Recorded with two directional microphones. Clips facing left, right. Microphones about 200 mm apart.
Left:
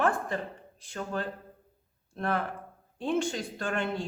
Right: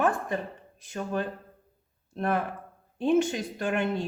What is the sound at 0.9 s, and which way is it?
Speech, 15° right (ahead or behind).